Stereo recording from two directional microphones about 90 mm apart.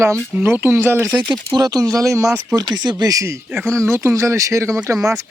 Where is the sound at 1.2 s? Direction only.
55° right (ahead or behind); by 2.3 s 35° right (ahead or behind).